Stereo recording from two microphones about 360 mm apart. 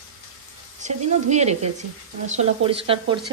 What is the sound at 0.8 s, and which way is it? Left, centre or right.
Speech, centre.